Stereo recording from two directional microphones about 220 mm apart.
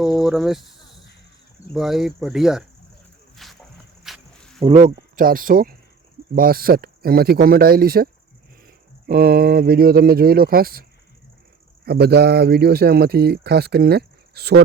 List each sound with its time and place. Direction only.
0.0 s speech: centre (ahead or behind)
3.3 s a sound: centre (ahead or behind)
4.0 s insect: centre (ahead or behind)
4.6 s speech: 30° right (ahead or behind)
11.9 s speech: 45° right (ahead or behind)